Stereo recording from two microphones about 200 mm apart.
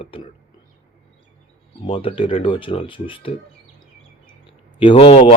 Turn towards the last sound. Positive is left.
turn(degrees=30)  # may be behind; listen again after turning